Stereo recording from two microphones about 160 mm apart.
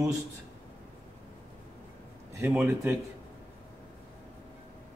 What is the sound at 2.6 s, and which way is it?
Speech, 15° right (ahead or behind).